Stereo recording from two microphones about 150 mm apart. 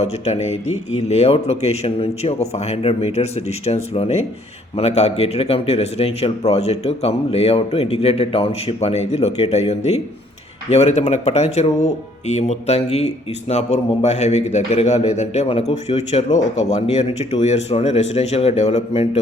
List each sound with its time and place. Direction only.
0.0 s a man's voice: 45° left (ahead or behind)